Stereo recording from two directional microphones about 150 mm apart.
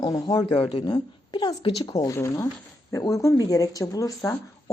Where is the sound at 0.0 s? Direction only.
25° left (ahead or behind).